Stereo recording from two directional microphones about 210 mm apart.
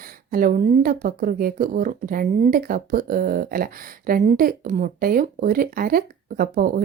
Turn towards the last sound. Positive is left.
turn(degrees=-45)  # may be behind; listen again after turning